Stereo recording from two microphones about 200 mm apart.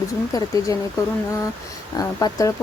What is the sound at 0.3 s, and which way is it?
Speech, 15° left (ahead or behind).